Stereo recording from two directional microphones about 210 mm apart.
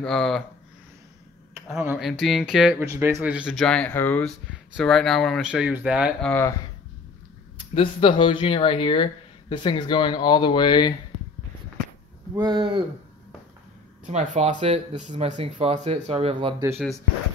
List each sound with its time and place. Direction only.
0.0 s speech: centre (ahead or behind)
1.8 s speech: 5° right (ahead or behind)
2.8 s speech: 15° right (ahead or behind)
7.5 s speech: 25° left (ahead or behind)
12.4 s speech: 20° right (ahead or behind)
14.1 s speech: 35° right (ahead or behind)